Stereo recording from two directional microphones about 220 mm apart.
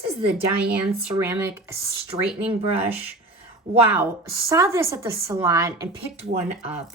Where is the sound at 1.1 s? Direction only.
15° right (ahead or behind).